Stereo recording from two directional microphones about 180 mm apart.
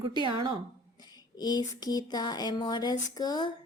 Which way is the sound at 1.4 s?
20° left (ahead or behind).